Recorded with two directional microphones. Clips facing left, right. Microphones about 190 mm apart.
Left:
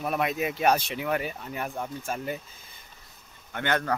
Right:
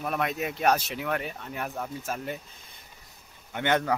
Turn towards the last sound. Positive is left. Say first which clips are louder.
# right 2 dB
turn(degrees=-20)  # may be behind; listen again after turning